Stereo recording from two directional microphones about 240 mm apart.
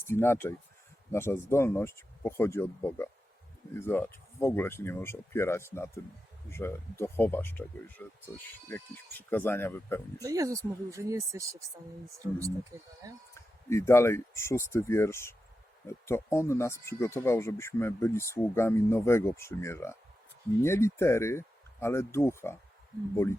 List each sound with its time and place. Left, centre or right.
0.0 s speech: centre
10.2 s speech: centre
13.3 s speech: centre